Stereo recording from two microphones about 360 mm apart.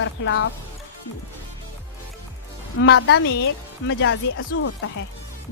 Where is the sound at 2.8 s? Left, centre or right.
Left.